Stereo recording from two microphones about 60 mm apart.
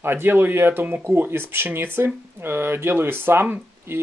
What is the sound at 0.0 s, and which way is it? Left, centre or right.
Speech, right.